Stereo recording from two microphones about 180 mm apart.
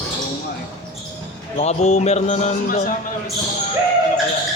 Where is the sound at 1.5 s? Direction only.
40° left (ahead or behind).